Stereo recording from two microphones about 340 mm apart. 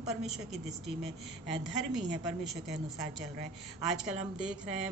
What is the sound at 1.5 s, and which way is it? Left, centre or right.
Speech, left.